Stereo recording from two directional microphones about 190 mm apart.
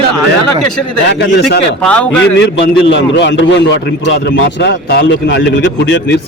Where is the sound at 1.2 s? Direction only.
55° left (ahead or behind).